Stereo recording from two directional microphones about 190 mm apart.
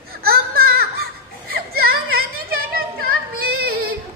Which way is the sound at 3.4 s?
50° right (ahead or behind).